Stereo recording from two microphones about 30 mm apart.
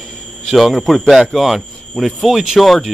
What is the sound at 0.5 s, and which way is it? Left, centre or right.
Speech, centre.